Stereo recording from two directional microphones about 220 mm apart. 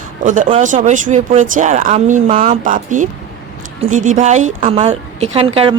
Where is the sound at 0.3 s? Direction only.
35° right (ahead or behind).